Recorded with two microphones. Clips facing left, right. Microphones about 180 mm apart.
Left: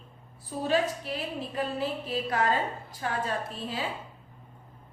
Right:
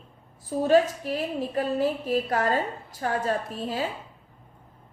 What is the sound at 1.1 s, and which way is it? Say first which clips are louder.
A woman's voice: right 6 dB; 45° right (ahead or behind).